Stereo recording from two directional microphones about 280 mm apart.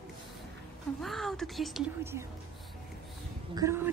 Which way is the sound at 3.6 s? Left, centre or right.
Centre.